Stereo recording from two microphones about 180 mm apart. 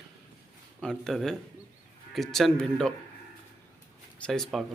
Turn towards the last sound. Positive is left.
turn(degrees=0)  # may be behind; listen again after turning